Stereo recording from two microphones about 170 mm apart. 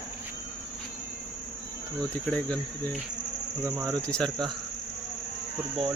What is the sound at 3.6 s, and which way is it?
Speech, 20° right (ahead or behind).